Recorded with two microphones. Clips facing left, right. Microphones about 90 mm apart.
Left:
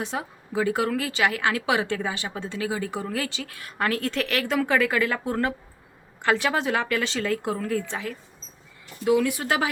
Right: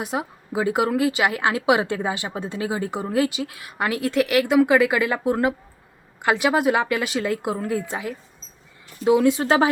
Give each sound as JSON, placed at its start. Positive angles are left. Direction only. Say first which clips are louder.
{"t": 0.0, "sound": "a woman's voice", "louder": "right 4 dB", "side_deg": -15}